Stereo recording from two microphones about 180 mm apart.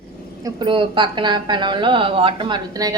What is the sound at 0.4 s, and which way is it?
A woman's voice, 25° right (ahead or behind).